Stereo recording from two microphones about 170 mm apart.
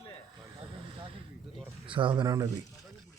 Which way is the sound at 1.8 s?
30° right (ahead or behind).